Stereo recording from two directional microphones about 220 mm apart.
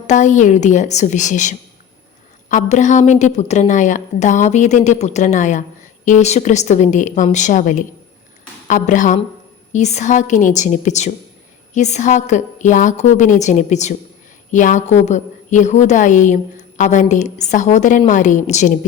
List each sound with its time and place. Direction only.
0.1 s a woman's voice: 35° left (ahead or behind)